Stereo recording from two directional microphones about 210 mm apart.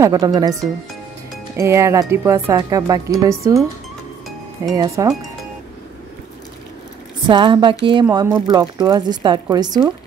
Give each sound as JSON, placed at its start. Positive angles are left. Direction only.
{"t": 0.0, "sound": "speech", "side_deg": -15}
{"t": 1.6, "sound": "speech", "side_deg": -15}
{"t": 4.7, "sound": "speech", "side_deg": -15}
{"t": 7.2, "sound": "speech", "side_deg": -20}